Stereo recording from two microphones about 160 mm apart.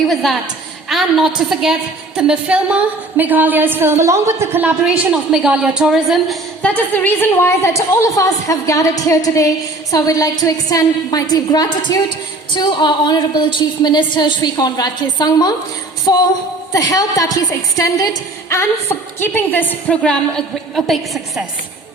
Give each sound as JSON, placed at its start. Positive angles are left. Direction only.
{"t": 0.1, "sound": "a woman's voice", "side_deg": 0}